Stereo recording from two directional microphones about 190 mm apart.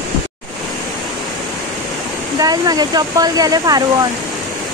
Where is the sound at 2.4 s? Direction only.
20° right (ahead or behind).